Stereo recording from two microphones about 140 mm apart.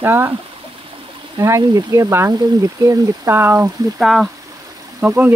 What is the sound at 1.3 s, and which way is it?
Speech, 25° right (ahead or behind).